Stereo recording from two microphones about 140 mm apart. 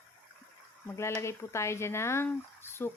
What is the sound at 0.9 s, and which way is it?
Speech, 20° left (ahead or behind).